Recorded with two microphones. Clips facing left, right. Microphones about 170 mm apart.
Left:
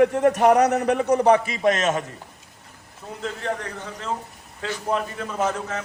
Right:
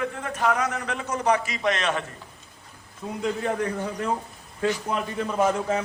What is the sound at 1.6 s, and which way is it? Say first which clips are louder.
Speech: left 2 dB; 45° left (ahead or behind).